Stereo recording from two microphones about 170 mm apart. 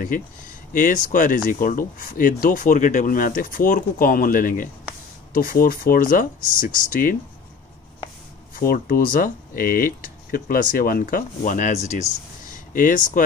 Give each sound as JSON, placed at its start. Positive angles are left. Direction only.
{"t": 0.0, "sound": "speech", "side_deg": 50}
{"t": 8.5, "sound": "speech", "side_deg": 60}